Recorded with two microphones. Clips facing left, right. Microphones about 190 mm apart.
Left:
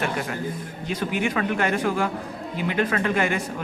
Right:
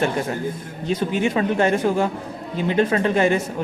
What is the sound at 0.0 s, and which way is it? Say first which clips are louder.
Speech: right 5 dB; 25° right (ahead or behind).